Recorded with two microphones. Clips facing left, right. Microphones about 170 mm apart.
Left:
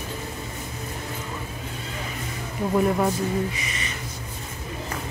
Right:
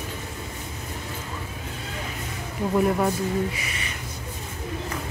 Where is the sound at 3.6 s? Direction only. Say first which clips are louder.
Left 1 dB; 5° right (ahead or behind).